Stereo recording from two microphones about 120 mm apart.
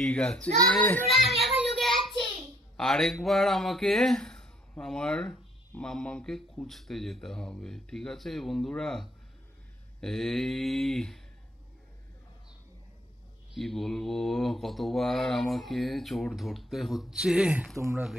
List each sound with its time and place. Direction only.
0.0 s a child's voice: 5° left (ahead or behind)
1.1 s child singing: centre (ahead or behind)
2.8 s mantra: 5° left (ahead or behind)
13.5 s mantra: centre (ahead or behind)
17.7 s speech: 25° right (ahead or behind)